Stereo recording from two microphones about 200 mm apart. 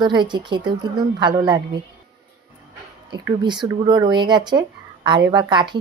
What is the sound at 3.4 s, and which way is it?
A woman's voice, 20° right (ahead or behind).